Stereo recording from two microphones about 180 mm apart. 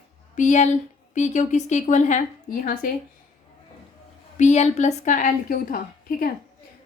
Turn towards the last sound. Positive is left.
turn(degrees=50)  # may be behind; listen again after turning